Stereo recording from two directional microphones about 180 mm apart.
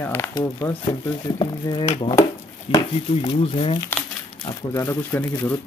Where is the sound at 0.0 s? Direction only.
10° left (ahead or behind); by 3.8 s 30° left (ahead or behind).